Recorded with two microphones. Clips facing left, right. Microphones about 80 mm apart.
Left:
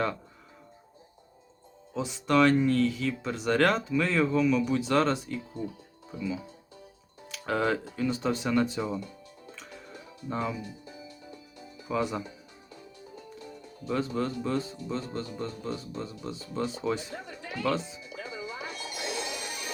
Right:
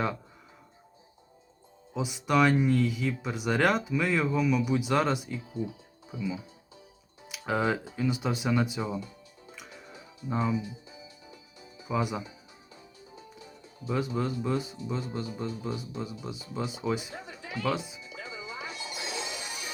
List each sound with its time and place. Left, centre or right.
1.9 s speech: centre
9.5 s music: centre
10.2 s speech: centre
10.6 s music: left
11.9 s speech: centre
12.7 s music: left
13.8 s speech: centre
17.2 s a sound: left
17.6 s speech: centre
18.0 s music: left